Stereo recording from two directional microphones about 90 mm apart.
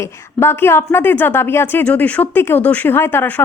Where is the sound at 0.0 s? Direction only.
30° left (ahead or behind).